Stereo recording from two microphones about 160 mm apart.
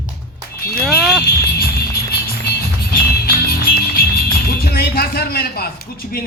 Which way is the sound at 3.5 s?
70° left (ahead or behind).